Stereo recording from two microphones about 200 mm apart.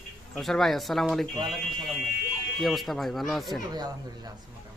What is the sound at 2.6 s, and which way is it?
A man's voice, centre (ahead or behind).